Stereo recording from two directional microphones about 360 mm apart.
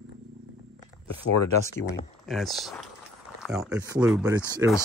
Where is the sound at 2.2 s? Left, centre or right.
Centre.